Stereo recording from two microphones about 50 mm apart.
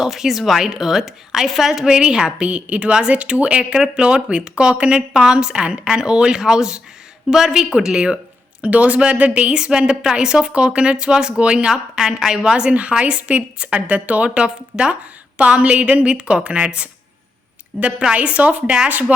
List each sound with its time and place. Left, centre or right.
0.0 s a woman's voice: centre; by 9.5 s right
9.5 s a woman's voice: centre
18.1 s a woman's voice: right